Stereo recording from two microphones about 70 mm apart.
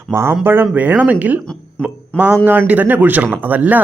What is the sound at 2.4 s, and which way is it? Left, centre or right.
Speech, right.